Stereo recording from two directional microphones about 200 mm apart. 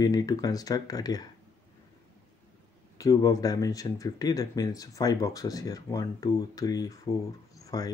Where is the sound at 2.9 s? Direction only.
15° left (ahead or behind).